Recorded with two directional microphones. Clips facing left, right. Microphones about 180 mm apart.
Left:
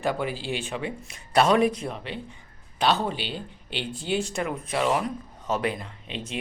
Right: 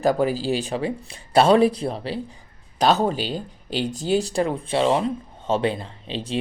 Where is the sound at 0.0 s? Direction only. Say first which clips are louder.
Right 7 dB; 40° right (ahead or behind).